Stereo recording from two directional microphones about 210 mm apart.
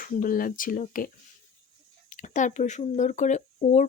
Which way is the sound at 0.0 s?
40° left (ahead or behind).